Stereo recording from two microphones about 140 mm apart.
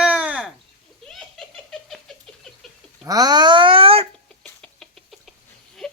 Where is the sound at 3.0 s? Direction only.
30° right (ahead or behind).